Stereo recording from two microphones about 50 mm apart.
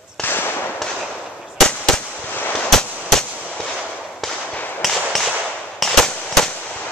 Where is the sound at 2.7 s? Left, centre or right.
Centre.